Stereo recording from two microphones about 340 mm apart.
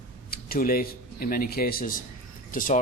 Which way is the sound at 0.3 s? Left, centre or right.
Left.